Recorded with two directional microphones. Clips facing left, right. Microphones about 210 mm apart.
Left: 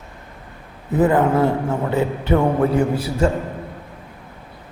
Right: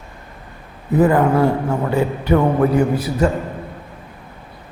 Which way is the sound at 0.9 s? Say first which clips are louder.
Right 2 dB; 20° left (ahead or behind).